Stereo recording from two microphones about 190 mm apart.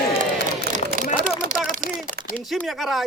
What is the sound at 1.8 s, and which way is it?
Speech, 45° right (ahead or behind).